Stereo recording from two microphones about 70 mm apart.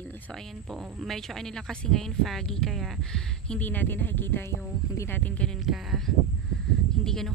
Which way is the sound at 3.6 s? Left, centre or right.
Left.